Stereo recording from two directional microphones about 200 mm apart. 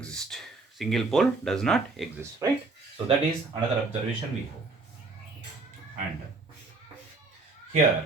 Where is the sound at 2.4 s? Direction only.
15° right (ahead or behind).